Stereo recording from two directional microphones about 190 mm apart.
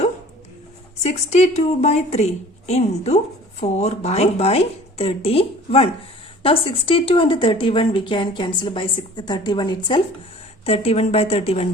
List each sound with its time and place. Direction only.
1.0 s speech: 35° left (ahead or behind)